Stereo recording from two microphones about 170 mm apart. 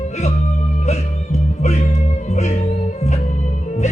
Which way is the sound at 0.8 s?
40° left (ahead or behind).